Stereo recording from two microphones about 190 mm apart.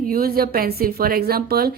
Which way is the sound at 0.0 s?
50° right (ahead or behind).